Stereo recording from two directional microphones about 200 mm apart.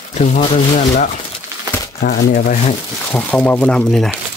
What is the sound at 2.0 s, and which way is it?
Speech, 50° left (ahead or behind).